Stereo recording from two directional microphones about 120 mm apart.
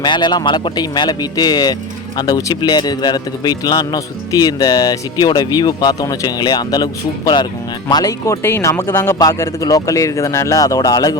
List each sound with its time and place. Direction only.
0.0 s speech: 40° left (ahead or behind)